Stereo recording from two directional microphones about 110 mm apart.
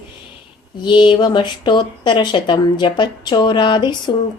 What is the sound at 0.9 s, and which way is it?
Speech, 45° left (ahead or behind).